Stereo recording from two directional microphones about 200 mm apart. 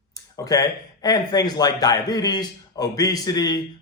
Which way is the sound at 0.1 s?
20° left (ahead or behind).